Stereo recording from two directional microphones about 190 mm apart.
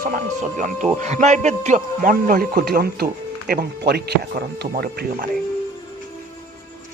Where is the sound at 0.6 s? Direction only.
40° right (ahead or behind).